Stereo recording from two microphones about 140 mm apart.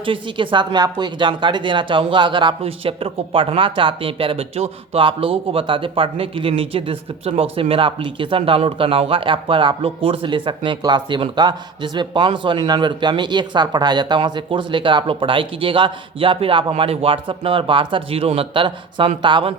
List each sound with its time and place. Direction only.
0.0 s a woman's voice: 35° right (ahead or behind)